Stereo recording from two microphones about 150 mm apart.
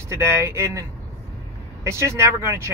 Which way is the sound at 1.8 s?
20° right (ahead or behind).